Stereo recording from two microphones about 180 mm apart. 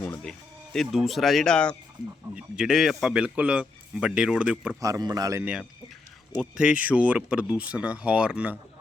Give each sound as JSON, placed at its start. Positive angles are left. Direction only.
{"t": 0.0, "sound": "speech", "side_deg": 0}
{"t": 4.8, "sound": "speech", "side_deg": -20}
{"t": 6.6, "sound": "speech", "side_deg": -5}